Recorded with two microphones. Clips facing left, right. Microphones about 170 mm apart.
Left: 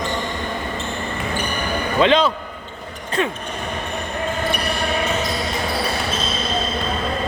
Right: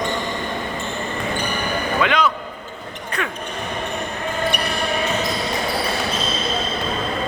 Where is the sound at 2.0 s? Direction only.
25° left (ahead or behind).